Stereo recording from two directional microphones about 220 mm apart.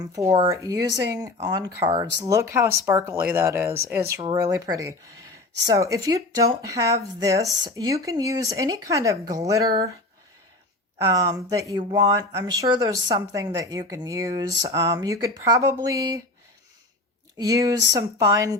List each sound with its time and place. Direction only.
0.0 s speech: 15° right (ahead or behind)
10.9 s speech: 15° right (ahead or behind)
17.3 s speech: 15° right (ahead or behind)